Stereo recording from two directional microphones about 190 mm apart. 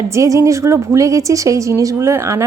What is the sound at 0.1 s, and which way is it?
A woman's voice, 15° right (ahead or behind).